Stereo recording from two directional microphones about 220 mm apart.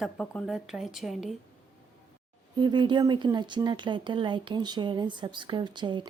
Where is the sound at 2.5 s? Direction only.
20° right (ahead or behind).